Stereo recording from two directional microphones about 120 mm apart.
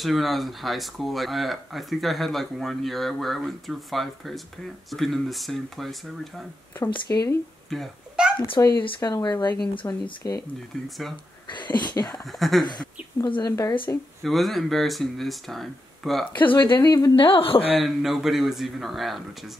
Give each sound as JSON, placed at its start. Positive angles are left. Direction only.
{"t": 0.0, "sound": "speech", "side_deg": 0}
{"t": 6.9, "sound": "speech", "side_deg": 35}
{"t": 7.7, "sound": "a sound", "side_deg": 0}
{"t": 8.4, "sound": "speech", "side_deg": 30}
{"t": 9.8, "sound": "speech", "side_deg": 25}
{"t": 11.4, "sound": "speech", "side_deg": 40}
{"t": 12.3, "sound": "speech", "side_deg": 0}
{"t": 12.6, "sound": "speech", "side_deg": 40}
{"t": 13.9, "sound": "speech", "side_deg": 20}
{"t": 14.2, "sound": "speech", "side_deg": 0}
{"t": 16.3, "sound": "speech", "side_deg": 40}
{"t": 16.8, "sound": "speech", "side_deg": 30}
{"t": 17.1, "sound": "a woman's voice", "side_deg": 50}
{"t": 17.7, "sound": "speech", "side_deg": 0}